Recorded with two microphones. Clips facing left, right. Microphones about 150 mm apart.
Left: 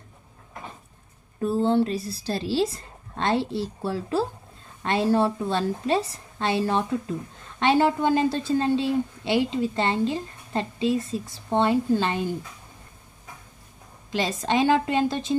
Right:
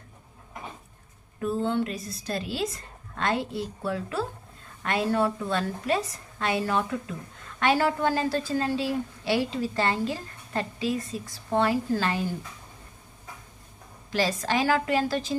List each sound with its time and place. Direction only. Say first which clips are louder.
1.4 s a woman's voice: left 5 dB; 30° left (ahead or behind)
14.1 s a woman's voice: left 2 dB; 25° left (ahead or behind)